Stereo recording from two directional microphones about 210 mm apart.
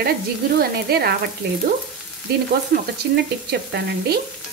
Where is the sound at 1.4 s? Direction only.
50° right (ahead or behind).